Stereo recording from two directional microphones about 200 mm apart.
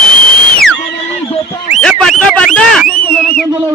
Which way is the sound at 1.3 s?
30° left (ahead or behind).